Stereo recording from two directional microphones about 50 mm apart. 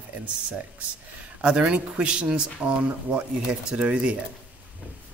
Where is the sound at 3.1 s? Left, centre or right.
Right.